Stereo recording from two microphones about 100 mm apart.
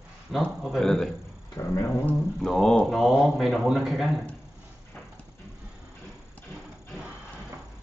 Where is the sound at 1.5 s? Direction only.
30° left (ahead or behind).